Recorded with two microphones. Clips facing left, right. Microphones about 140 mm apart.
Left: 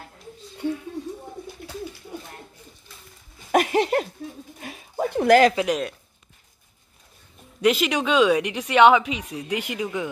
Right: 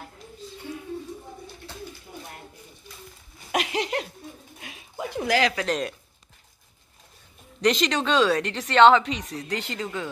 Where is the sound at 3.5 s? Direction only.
50° left (ahead or behind).